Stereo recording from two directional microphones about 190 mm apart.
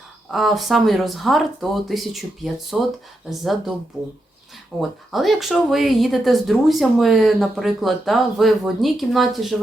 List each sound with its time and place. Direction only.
0.3 s speech: centre (ahead or behind)
4.8 s speech: centre (ahead or behind)